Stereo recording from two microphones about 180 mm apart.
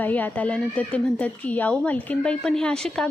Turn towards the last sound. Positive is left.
turn(degrees=5)  # may be behind; listen again after turning